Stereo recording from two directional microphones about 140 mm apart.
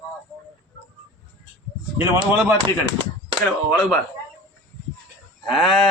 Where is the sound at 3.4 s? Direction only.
5° left (ahead or behind).